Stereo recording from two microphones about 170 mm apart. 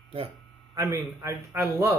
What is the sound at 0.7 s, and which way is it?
Speech, 20° right (ahead or behind).